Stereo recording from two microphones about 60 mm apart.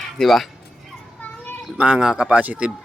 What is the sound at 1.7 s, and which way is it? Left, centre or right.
Speech, centre.